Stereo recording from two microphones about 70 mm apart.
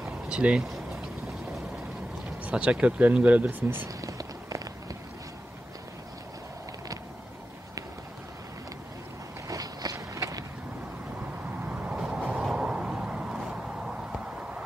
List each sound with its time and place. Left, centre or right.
0.0 s a sound: centre
2.4 s speech: centre
4.0 s a sound: right
9.5 s walk: right
9.9 s vehicle: right
11.6 s vehicle: centre